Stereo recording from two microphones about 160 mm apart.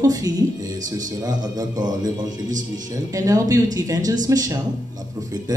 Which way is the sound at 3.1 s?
20° right (ahead or behind).